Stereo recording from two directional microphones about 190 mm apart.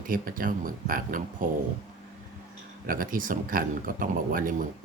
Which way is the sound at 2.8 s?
45° right (ahead or behind).